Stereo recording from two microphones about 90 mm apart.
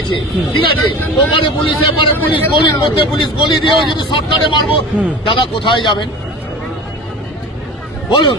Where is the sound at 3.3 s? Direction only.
65° left (ahead or behind).